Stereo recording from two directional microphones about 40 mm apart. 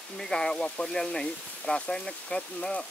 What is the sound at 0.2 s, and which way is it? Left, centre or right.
Speech, centre.